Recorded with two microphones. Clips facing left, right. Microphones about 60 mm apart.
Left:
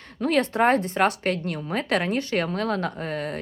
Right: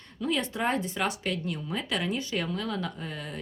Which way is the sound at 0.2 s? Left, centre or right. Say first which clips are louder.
Left 8 dB; left.